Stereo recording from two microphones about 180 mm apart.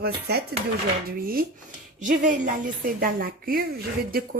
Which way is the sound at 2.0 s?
45° right (ahead or behind).